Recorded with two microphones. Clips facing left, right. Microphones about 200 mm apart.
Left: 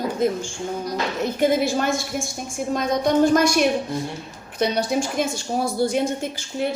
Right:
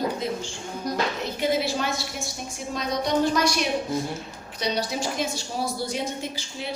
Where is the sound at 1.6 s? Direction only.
50° left (ahead or behind).